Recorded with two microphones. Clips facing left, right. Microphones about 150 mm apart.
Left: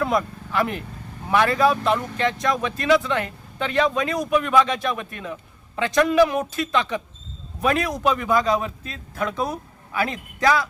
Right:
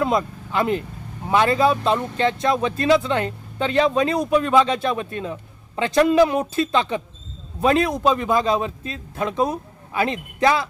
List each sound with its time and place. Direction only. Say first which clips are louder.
0.0 s speech: right 2 dB; 25° right (ahead or behind)